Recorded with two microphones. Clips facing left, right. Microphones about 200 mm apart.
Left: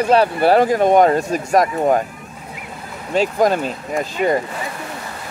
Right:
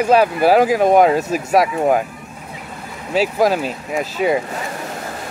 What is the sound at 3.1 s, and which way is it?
Speech, 5° right (ahead or behind).